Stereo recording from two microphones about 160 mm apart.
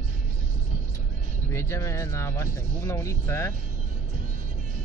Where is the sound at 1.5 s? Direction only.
15° left (ahead or behind).